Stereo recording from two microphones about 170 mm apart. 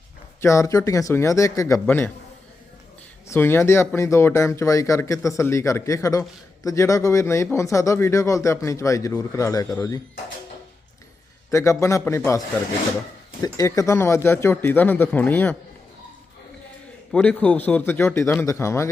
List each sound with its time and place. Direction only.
0.4 s speech: 15° left (ahead or behind)
3.2 s speech: 15° left (ahead or behind)
11.5 s speech: 20° left (ahead or behind)
13.4 s speech: 20° left (ahead or behind)
17.1 s speech: 5° left (ahead or behind)